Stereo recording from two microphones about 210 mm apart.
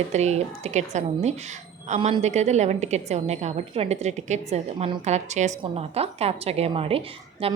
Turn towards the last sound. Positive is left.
turn(degrees=-25)  # may be behind; listen again after turning